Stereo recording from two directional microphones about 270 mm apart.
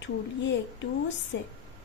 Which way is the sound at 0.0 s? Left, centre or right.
Left.